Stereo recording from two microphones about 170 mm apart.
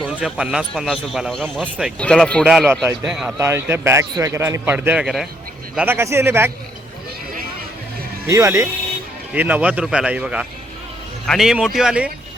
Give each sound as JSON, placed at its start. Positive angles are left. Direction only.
{"t": 0.1, "sound": "a man's voice", "side_deg": -5}
{"t": 3.3, "sound": "a man's voice", "side_deg": -15}
{"t": 5.7, "sound": "a man's voice", "side_deg": -10}
{"t": 8.3, "sound": "a man's voice", "side_deg": -20}